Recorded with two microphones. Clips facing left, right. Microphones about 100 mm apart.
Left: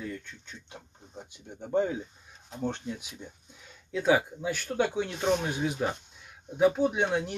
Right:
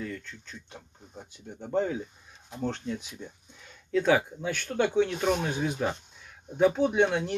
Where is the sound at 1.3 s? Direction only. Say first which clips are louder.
Left 1 dB; 15° left (ahead or behind).